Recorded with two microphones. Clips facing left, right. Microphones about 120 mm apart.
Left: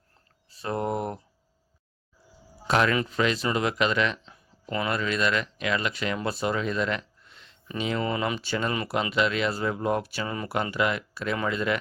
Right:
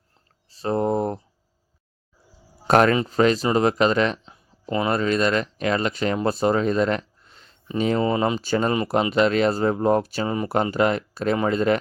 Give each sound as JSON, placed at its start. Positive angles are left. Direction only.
{"t": 0.5, "sound": "speech", "side_deg": -35}
{"t": 2.6, "sound": "speech", "side_deg": -45}
{"t": 2.9, "sound": "speech", "side_deg": -35}
{"t": 4.3, "sound": "a sound", "side_deg": -25}
{"t": 4.9, "sound": "speech", "side_deg": -40}
{"t": 8.0, "sound": "speech", "side_deg": -30}
{"t": 10.2, "sound": "speech", "side_deg": -25}
{"t": 10.5, "sound": "speech", "side_deg": -40}